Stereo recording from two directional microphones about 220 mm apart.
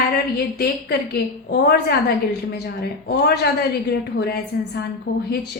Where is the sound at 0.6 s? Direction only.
45° left (ahead or behind).